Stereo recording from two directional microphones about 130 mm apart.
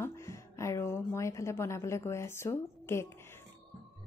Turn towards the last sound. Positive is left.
turn(degrees=20)  # may be behind; listen again after turning